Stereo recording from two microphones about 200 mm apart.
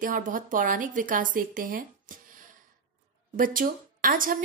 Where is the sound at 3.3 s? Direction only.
45° right (ahead or behind).